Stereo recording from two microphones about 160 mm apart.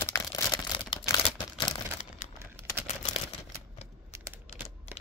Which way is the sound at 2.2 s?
50° left (ahead or behind).